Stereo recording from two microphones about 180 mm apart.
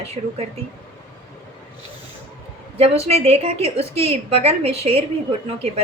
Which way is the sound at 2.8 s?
35° right (ahead or behind).